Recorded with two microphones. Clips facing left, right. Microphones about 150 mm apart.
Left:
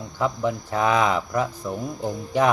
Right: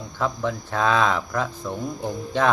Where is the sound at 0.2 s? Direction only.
15° left (ahead or behind).